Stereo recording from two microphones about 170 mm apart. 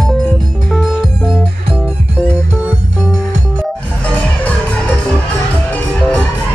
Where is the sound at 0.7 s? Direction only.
5° right (ahead or behind).